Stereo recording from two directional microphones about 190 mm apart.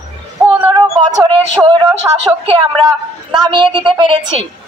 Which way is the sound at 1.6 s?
10° right (ahead or behind).